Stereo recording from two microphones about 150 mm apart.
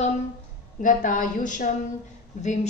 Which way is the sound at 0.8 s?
60° left (ahead or behind).